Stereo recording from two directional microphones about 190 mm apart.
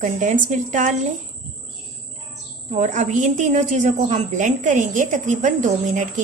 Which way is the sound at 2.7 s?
40° right (ahead or behind).